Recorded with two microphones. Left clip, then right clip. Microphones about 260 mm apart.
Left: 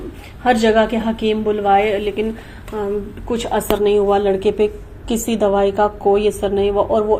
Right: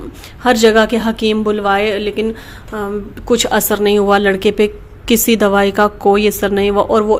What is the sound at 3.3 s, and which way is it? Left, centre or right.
Speech, right.